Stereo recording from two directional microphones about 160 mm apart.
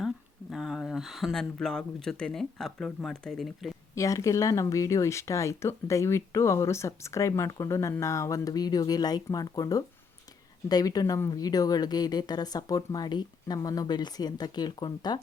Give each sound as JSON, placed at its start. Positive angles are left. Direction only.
{"t": 0.5, "sound": "speech", "side_deg": 0}
{"t": 3.9, "sound": "speech", "side_deg": 20}